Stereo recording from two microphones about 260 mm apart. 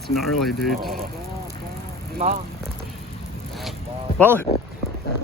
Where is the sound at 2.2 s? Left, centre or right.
Right.